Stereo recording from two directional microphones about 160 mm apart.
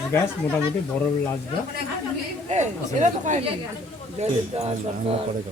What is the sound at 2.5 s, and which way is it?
Speech, 50° right (ahead or behind).